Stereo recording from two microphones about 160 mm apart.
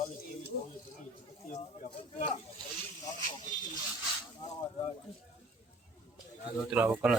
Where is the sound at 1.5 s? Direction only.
45° left (ahead or behind).